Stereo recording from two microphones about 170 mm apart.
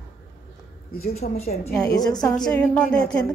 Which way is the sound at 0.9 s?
65° left (ahead or behind).